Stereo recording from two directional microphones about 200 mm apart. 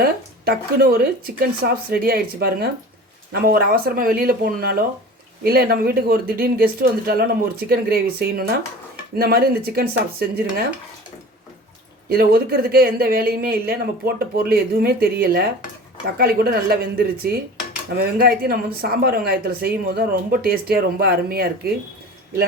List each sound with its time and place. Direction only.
0.0 s a woman's voice: 50° right (ahead or behind)
12.0 s a woman's voice: 50° right (ahead or behind)